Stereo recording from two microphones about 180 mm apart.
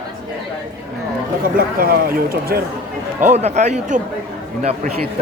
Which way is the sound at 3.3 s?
40° right (ahead or behind).